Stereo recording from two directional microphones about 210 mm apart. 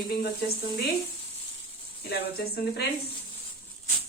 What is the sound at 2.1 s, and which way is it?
Speech, 50° left (ahead or behind).